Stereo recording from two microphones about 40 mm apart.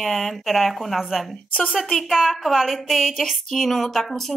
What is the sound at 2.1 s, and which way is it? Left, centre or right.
A woman's voice, centre.